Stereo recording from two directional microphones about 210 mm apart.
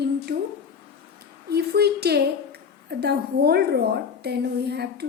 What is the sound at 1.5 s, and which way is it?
A woman's voice, 50° right (ahead or behind).